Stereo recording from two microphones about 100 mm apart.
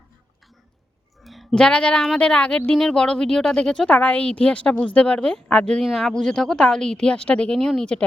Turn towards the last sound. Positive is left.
turn(degrees=5)  # may be behind; listen again after turning